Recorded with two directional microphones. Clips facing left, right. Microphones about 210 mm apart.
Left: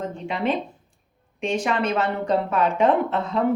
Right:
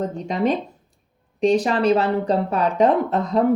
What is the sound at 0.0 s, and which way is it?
Speech, 40° right (ahead or behind).